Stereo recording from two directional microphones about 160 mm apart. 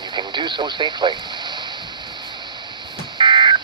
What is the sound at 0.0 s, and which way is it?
Speech, 30° right (ahead or behind).